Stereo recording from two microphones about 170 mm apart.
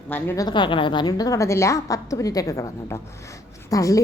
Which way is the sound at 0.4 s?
30° left (ahead or behind).